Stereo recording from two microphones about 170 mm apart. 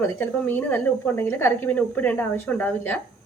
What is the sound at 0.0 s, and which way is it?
A woman's voice, 10° left (ahead or behind).